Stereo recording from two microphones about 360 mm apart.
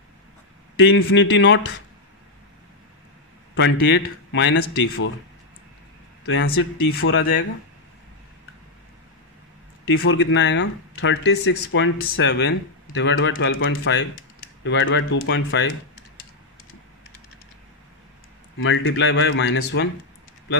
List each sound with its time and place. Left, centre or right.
0.7 s speech: left
3.8 s speech: left
6.2 s speech: left
9.9 s speech: left
18.6 s speech: left